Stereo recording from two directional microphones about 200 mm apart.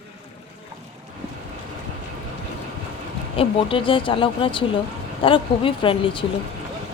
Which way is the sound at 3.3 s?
25° left (ahead or behind).